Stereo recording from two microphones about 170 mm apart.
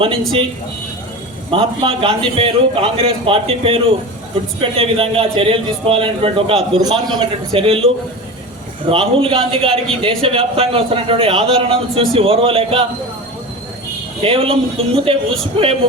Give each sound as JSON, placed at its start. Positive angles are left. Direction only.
{"t": 1.5, "sound": "a man's voice", "side_deg": -30}
{"t": 14.2, "sound": "a man's voice", "side_deg": -35}